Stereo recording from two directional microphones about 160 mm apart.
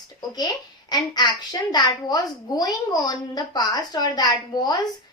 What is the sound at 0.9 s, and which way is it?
Speech, 25° left (ahead or behind).